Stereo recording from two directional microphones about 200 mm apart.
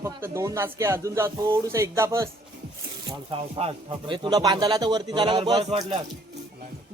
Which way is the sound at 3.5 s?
25° right (ahead or behind).